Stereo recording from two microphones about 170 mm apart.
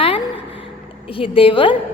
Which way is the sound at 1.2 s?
30° left (ahead or behind).